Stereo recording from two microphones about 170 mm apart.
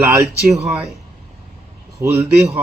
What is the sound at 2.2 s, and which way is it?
Speech, 5° right (ahead or behind).